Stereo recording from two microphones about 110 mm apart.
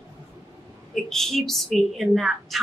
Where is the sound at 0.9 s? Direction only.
5° left (ahead or behind).